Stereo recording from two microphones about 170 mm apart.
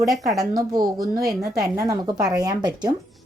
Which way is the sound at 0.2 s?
20° right (ahead or behind).